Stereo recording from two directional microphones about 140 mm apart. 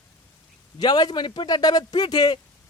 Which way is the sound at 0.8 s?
30° left (ahead or behind).